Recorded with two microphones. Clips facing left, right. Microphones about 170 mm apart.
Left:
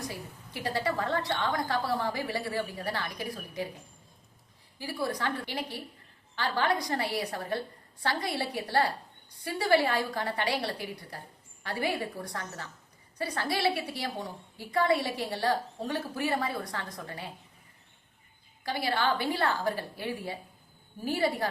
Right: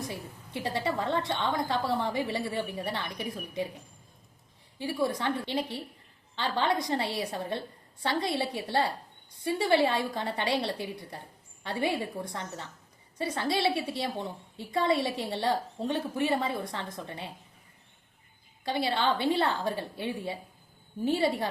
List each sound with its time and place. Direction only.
0.1 s a woman's voice: 20° right (ahead or behind)
4.8 s a woman's voice: 20° right (ahead or behind)
18.6 s a woman's voice: 25° right (ahead or behind)